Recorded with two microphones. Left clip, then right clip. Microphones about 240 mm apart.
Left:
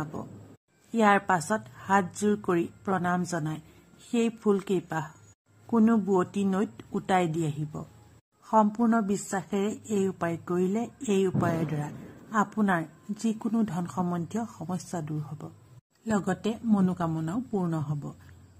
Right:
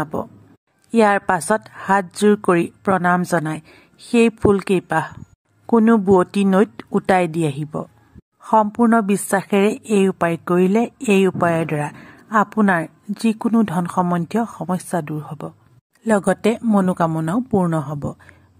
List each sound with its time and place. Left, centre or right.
0.0 s a woman's voice: right